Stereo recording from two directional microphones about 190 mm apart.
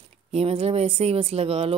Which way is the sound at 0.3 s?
30° right (ahead or behind).